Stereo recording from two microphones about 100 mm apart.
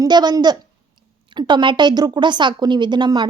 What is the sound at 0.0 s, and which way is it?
A woman's voice, 45° right (ahead or behind).